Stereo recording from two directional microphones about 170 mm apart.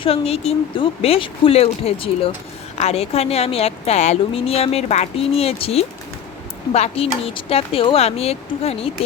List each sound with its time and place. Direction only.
0.0 s a woman's voice: 35° left (ahead or behind)